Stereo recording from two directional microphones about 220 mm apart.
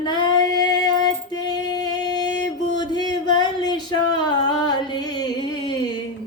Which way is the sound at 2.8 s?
20° left (ahead or behind).